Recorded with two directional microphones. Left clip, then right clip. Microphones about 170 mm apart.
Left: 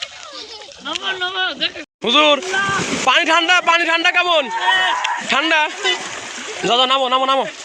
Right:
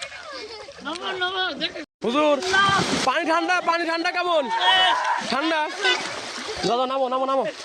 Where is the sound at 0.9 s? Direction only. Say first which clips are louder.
Left 5 dB; 10° right (ahead or behind).